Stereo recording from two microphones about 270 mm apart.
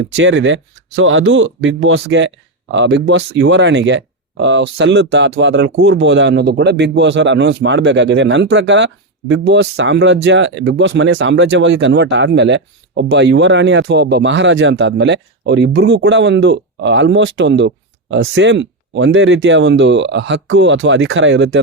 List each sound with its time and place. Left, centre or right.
0.1 s speech: right